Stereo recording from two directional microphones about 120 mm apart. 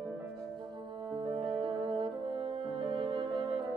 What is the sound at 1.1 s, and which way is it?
Music, 45° right (ahead or behind).